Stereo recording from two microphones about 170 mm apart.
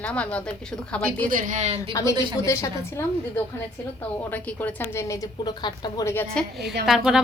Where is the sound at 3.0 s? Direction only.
15° left (ahead or behind).